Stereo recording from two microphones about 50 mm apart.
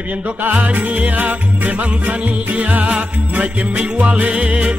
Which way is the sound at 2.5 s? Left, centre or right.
Right.